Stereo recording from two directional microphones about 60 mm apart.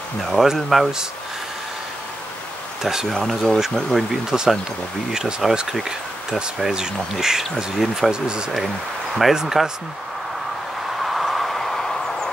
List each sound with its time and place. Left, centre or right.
0.2 s speech: centre
2.8 s speech: centre
3.2 s speech: centre
11.0 s a sound: centre